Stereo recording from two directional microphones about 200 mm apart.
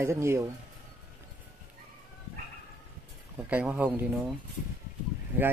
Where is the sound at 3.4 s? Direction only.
5° right (ahead or behind).